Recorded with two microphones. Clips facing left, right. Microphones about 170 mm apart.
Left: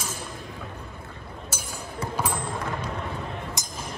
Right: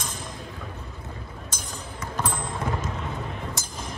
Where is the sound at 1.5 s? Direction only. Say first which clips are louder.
Left 2 dB; 10° left (ahead or behind).